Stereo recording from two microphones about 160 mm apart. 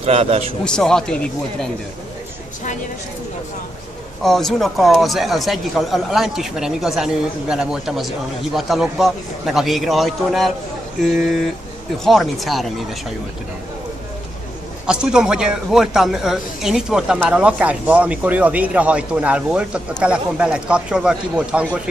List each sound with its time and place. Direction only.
0.0 s a man's voice: 40° right (ahead or behind)
0.7 s speech: 5° left (ahead or behind)
4.2 s speech: centre (ahead or behind)
14.9 s speech: 5° right (ahead or behind)